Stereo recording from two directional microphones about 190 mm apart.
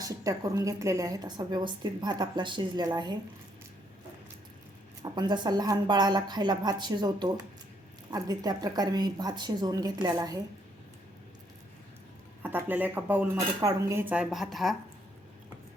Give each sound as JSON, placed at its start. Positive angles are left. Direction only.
{"t": 0.0, "sound": "a woman's voice", "side_deg": -15}
{"t": 5.1, "sound": "a woman's voice", "side_deg": -25}
{"t": 12.4, "sound": "speech", "side_deg": -10}